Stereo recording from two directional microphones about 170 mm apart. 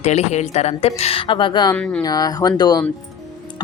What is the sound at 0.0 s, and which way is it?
A woman's voice, 40° left (ahead or behind).